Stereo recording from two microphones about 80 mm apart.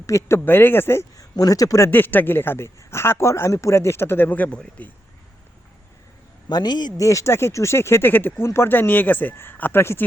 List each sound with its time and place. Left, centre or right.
0.0 s speech: left
1.1 s speech: left
1.9 s speech: left
6.5 s speech: left
7.0 s speech: left